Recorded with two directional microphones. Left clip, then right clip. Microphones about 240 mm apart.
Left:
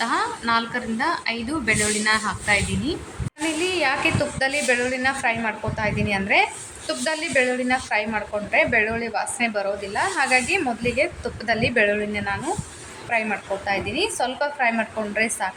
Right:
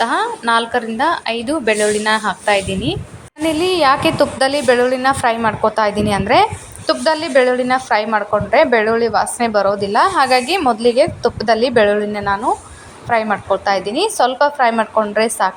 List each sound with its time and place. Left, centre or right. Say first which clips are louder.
0.0 s a woman's voice: right 7 dB; centre